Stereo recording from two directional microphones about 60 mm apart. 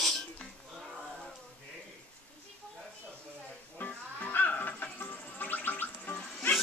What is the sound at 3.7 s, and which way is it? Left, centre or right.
Music, left.